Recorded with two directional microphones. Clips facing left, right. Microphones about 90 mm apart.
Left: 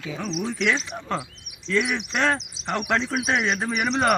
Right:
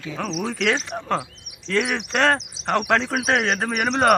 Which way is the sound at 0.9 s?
45° right (ahead or behind).